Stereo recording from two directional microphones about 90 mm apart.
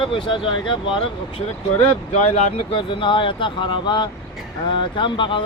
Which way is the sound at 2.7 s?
70° left (ahead or behind).